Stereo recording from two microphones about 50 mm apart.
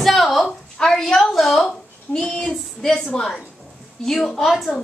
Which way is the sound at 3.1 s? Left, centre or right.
Centre.